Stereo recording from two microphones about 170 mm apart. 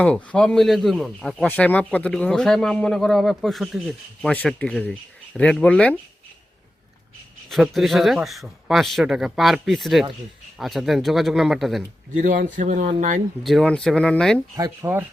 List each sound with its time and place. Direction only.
0.0 s speech: 5° left (ahead or behind)
7.5 s speech: centre (ahead or behind)
12.1 s speech: 50° right (ahead or behind)
13.4 s speech: centre (ahead or behind)
14.5 s speech: 15° right (ahead or behind)